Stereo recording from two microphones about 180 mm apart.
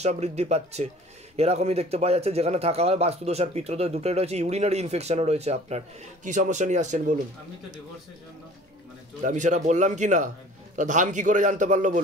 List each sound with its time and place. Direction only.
0.0 s a man's voice: 35° right (ahead or behind)
9.2 s a man's voice: 40° right (ahead or behind)